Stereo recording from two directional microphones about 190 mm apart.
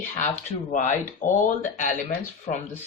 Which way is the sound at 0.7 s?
40° left (ahead or behind).